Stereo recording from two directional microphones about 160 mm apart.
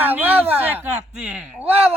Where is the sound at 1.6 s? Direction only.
40° right (ahead or behind).